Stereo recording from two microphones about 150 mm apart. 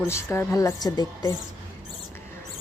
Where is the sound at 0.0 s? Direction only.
15° left (ahead or behind).